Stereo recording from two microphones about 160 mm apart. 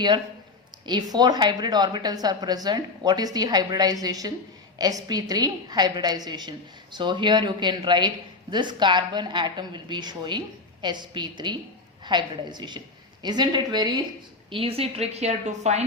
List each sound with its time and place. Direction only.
1.1 s a woman's voice: 25° right (ahead or behind); by 15.8 s 45° right (ahead or behind)